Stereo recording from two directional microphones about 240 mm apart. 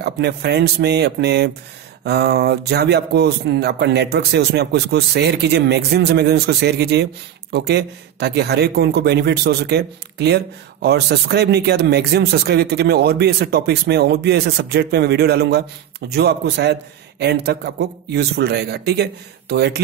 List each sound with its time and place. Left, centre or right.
0.0 s a man's voice: right